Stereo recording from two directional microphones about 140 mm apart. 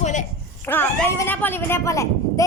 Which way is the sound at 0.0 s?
60° left (ahead or behind).